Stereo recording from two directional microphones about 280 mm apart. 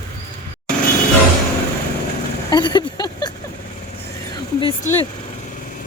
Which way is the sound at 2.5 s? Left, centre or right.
Centre.